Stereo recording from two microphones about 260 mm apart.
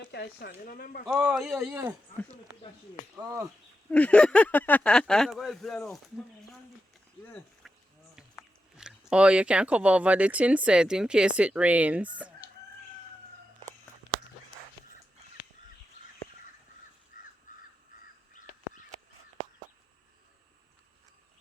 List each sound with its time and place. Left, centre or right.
0.1 s speech: left
1.0 s speech: centre
3.2 s speech: centre
3.9 s speech: centre
7.6 s a sound: centre
8.1 s speech: centre